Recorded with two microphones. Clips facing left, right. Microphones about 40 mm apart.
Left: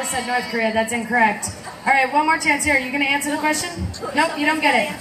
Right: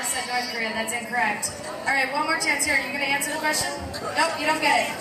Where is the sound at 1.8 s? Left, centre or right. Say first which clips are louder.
Left 7 dB; left.